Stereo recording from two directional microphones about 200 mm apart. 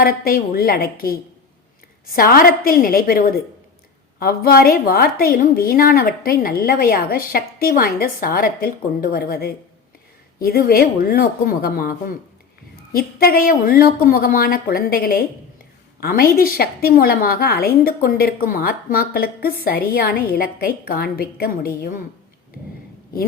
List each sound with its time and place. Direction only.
0.0 s a woman's voice: 50° left (ahead or behind)